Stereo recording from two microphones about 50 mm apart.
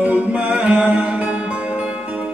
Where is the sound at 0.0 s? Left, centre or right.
Right.